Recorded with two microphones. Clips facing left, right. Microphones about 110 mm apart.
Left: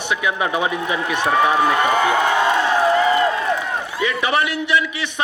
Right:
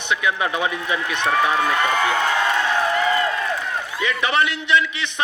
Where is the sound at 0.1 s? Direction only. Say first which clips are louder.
Left 1 dB; 20° left (ahead or behind).